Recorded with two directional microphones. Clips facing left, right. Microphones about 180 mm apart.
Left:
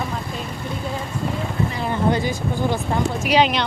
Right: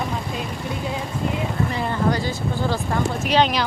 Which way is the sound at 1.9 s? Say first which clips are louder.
Left 2 dB; 20° left (ahead or behind).